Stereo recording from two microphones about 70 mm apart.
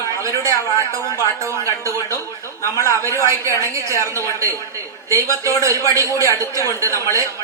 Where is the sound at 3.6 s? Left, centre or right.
Right.